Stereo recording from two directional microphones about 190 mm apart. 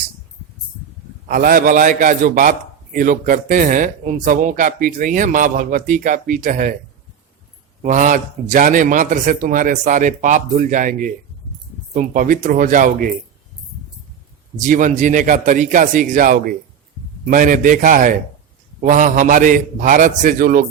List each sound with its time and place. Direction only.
1.3 s a man's voice: 50° right (ahead or behind)
7.8 s a man's voice: 40° right (ahead or behind)
14.6 s a man's voice: 40° right (ahead or behind)